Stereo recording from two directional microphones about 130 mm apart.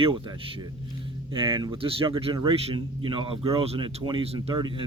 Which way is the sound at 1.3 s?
40° right (ahead or behind).